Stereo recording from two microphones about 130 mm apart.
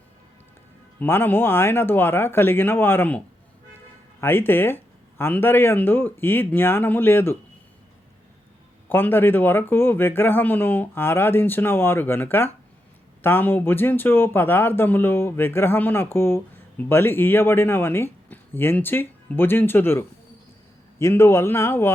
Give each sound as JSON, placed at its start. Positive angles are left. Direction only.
{"t": 0.9, "sound": "speech", "side_deg": 15}
{"t": 8.9, "sound": "speech", "side_deg": 15}